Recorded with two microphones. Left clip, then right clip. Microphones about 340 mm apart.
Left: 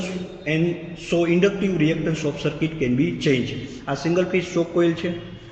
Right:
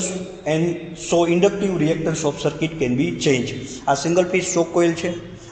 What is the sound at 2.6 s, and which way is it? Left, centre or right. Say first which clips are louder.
A man's voice: right 1 dB; centre.